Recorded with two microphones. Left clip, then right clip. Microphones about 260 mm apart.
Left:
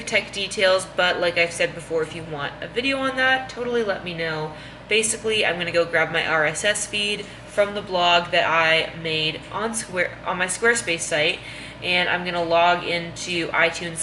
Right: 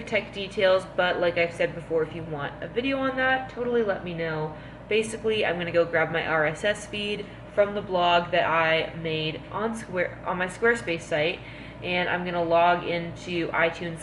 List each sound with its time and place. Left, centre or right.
0.1 s speech: centre
1.9 s speech: right
2.6 s speech: centre